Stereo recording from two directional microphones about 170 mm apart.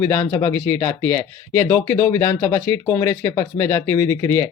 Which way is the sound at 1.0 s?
10° left (ahead or behind).